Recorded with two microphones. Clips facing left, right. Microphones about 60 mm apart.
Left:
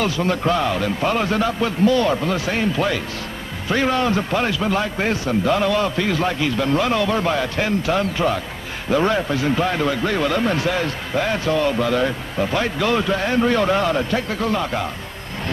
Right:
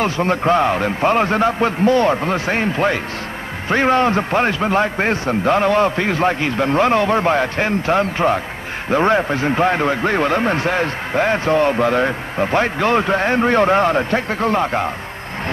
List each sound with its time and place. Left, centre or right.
0.0 s a man's voice: right